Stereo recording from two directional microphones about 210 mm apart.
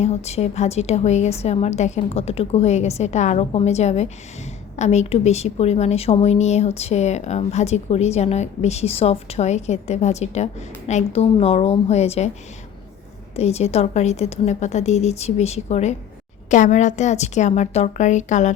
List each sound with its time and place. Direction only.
0.0 s a woman's voice: 30° left (ahead or behind)
13.3 s a woman's voice: 30° left (ahead or behind)